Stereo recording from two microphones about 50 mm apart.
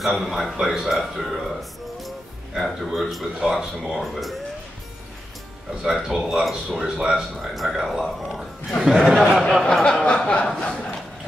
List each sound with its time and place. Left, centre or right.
0.0 s a man's voice: centre
5.9 s speech: centre
9.4 s speech: centre
9.8 s a sound: centre
10.6 s speech: centre